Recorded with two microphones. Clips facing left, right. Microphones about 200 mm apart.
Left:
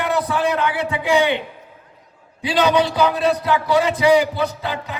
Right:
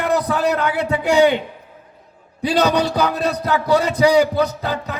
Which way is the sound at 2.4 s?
40° right (ahead or behind).